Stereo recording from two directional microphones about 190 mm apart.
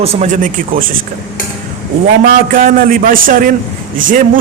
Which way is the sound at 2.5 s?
45° right (ahead or behind).